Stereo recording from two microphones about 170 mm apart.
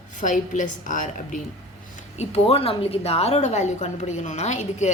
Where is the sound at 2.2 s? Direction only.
35° left (ahead or behind).